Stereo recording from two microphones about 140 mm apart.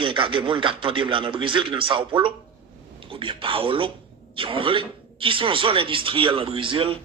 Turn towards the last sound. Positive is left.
turn(degrees=-40)  # may be behind; listen again after turning